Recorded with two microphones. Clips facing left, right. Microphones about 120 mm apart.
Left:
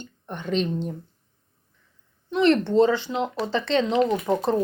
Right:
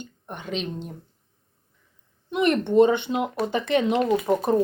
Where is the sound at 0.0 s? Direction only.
10° right (ahead or behind).